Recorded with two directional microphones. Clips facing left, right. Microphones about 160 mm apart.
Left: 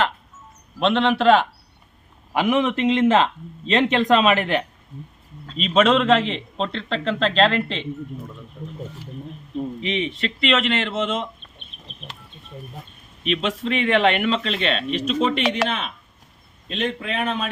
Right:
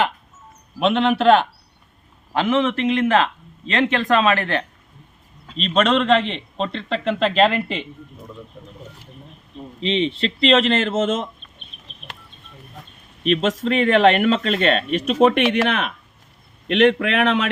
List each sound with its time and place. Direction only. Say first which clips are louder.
0.8 s a man's voice: right 1 dB; 5° right (ahead or behind)
2.3 s speech: right 1 dB; 15° left (ahead or behind)
5.5 s a man's voice: left 1 dB; 5° left (ahead or behind)
9.8 s speech: right 8 dB; 25° right (ahead or behind); by 11.3 s 45° right (ahead or behind)
13.2 s a man's voice: right 4 dB; 45° right (ahead or behind)
16.6 s a man's voice: right 10 dB; 75° right (ahead or behind)